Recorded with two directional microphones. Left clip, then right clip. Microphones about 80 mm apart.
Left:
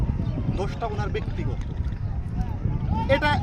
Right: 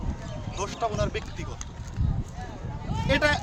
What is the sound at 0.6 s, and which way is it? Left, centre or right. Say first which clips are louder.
Speech: right 4 dB; right.